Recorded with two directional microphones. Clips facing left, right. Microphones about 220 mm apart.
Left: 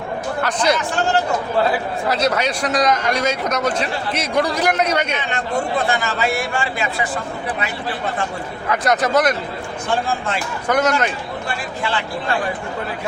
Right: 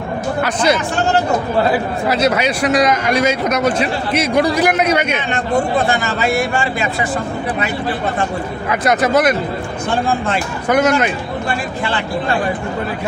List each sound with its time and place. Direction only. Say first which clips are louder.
0.4 s a man's voice: right 2 dB; 5° right (ahead or behind)
2.0 s a man's voice: right 3 dB; 5° right (ahead or behind)
5.3 s a man's voice: right 7 dB; 45° right (ahead or behind)
8.7 s a man's voice: right 3 dB; 5° right (ahead or behind)
10.1 s a man's voice: right 5 dB; 55° right (ahead or behind)
10.7 s a man's voice: right 4 dB; 5° right (ahead or behind)
11.4 s a man's voice: right 3 dB; 55° right (ahead or behind)